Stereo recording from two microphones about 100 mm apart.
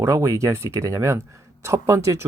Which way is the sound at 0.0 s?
30° right (ahead or behind).